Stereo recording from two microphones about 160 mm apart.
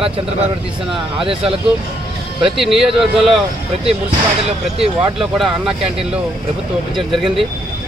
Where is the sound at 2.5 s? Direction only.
Centre (ahead or behind).